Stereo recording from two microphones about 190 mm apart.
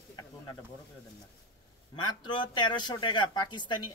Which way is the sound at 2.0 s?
25° left (ahead or behind).